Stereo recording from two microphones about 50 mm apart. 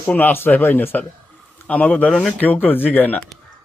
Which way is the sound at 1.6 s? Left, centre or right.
Left.